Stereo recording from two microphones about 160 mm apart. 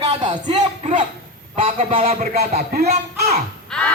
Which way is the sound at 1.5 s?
35° right (ahead or behind).